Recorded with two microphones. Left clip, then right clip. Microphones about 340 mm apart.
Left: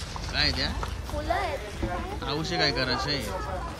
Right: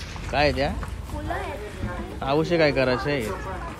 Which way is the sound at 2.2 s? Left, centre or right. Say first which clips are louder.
Right 7 dB; centre.